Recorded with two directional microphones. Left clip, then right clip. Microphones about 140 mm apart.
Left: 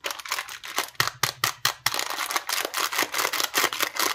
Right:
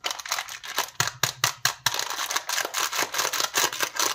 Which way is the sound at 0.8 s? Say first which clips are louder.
Left 1 dB; 10° left (ahead or behind).